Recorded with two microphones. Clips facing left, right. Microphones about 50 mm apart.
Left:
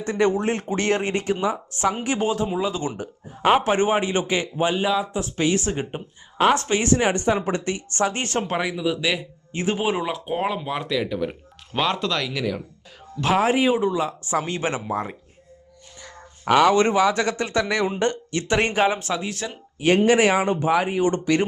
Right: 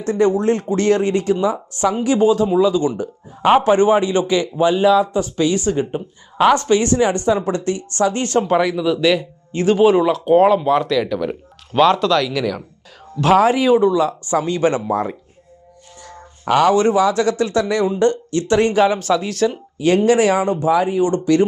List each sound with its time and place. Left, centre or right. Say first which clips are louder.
0.0 s speech: right 5 dB; left; by 15.1 s centre
16.6 s speech: right 3 dB; left